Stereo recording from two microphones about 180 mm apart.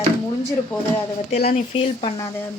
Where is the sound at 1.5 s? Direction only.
30° left (ahead or behind).